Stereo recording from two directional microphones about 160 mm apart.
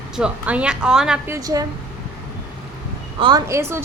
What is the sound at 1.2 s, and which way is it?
Speech, 20° right (ahead or behind).